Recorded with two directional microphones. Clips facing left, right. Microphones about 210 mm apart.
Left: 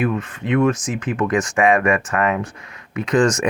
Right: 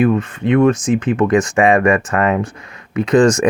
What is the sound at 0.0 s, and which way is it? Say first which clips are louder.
Speech: right 7 dB; 35° right (ahead or behind).